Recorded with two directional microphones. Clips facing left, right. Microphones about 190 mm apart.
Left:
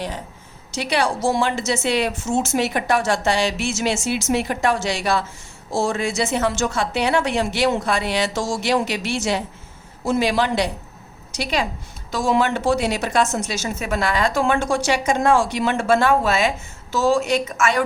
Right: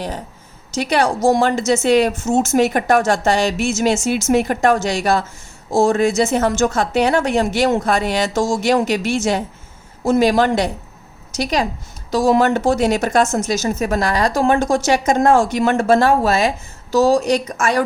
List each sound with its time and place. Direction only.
0.7 s a woman's voice: 45° right (ahead or behind)